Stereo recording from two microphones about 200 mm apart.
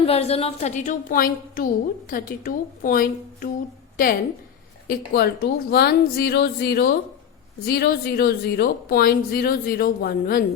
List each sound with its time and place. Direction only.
0.0 s a woman's voice: 30° left (ahead or behind); by 10.4 s 50° left (ahead or behind)